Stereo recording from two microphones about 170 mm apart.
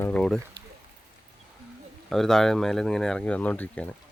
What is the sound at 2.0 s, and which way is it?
Speech, centre (ahead or behind).